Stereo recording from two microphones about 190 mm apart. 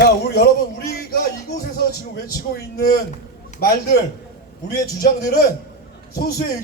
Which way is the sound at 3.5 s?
55° left (ahead or behind).